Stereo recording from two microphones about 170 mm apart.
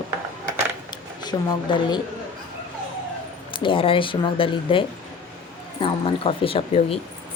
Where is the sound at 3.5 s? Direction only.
30° left (ahead or behind).